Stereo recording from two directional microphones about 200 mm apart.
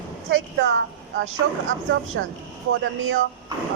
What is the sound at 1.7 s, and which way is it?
A woman's voice, 80° right.